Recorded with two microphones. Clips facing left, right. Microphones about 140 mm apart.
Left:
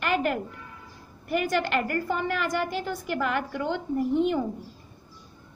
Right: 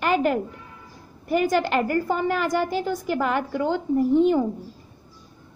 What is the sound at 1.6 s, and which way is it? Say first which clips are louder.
Speech: right 4 dB; centre (ahead or behind).